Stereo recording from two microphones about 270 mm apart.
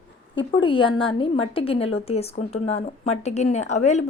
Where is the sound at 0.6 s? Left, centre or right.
Centre.